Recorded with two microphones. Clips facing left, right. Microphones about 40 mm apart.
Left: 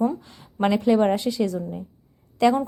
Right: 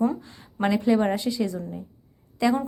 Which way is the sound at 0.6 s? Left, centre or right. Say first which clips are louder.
Left 2 dB; centre.